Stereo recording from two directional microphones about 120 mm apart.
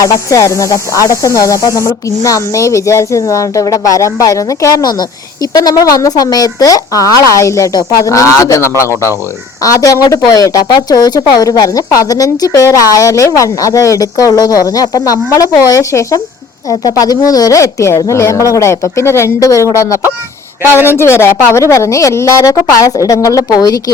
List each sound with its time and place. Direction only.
0.0 s speech: 25° left (ahead or behind)
20.6 s speech: 15° right (ahead or behind)
20.9 s speech: 20° left (ahead or behind)